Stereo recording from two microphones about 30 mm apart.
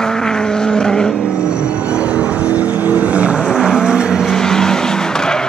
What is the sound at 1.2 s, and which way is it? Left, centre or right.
Vehicle, right.